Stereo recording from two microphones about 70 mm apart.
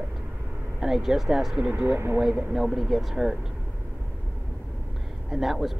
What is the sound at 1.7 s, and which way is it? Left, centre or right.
Speech, right.